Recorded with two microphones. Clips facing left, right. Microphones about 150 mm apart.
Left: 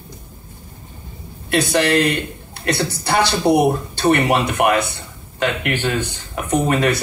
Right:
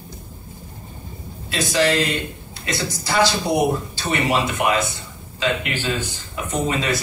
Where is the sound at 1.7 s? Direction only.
55° left (ahead or behind).